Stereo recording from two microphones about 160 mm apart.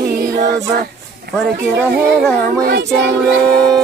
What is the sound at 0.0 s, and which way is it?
A capella, 90° right.